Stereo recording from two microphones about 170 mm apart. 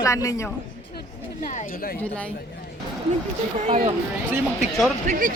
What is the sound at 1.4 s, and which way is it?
Speech, 50° left (ahead or behind).